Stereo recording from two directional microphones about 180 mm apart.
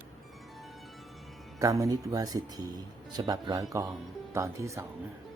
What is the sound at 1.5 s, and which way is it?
Speech, 20° right (ahead or behind).